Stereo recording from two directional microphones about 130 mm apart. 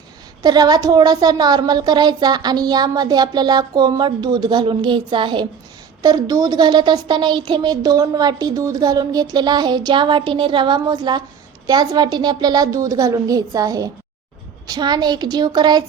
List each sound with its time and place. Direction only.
0.4 s a child's voice: 30° right (ahead or behind)